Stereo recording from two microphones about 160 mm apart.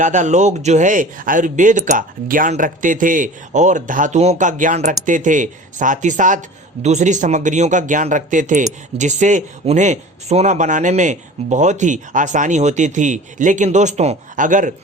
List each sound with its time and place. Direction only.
0.0 s speech: 50° right (ahead or behind)